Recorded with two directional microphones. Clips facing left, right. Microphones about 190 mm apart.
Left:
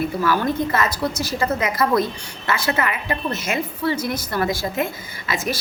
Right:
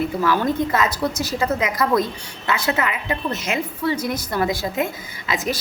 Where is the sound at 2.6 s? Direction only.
20° right (ahead or behind).